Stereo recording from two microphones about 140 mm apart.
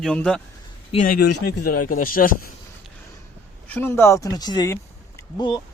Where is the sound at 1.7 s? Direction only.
90° left.